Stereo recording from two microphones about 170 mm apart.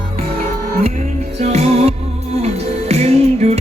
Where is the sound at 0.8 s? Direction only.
40° right (ahead or behind).